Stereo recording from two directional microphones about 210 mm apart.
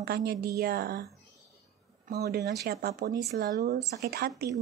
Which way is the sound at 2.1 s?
50° right (ahead or behind).